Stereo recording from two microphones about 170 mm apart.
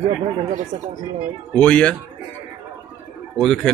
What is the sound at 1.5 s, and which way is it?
Speech, 5° left (ahead or behind).